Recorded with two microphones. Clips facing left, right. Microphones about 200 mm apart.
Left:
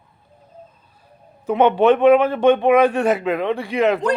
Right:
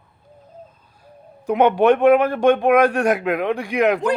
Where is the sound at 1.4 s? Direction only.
10° right (ahead or behind).